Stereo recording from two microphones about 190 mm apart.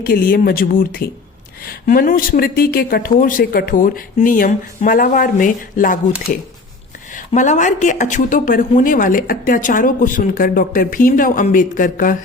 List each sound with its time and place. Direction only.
0.0 s a woman's voice: 50° left (ahead or behind)
7.1 s a woman's voice: 40° left (ahead or behind)